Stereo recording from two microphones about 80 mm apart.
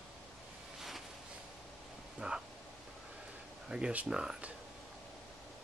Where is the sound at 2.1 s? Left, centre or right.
Centre.